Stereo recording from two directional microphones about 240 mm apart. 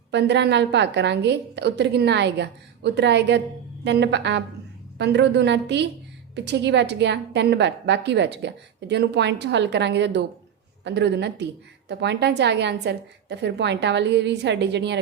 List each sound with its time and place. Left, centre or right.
0.1 s a woman's voice: right